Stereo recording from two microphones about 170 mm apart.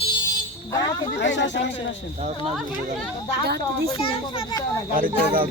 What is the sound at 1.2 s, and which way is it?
Speech, 90° left.